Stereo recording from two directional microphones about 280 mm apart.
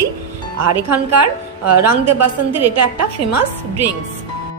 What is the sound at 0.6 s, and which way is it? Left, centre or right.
A woman's voice, right.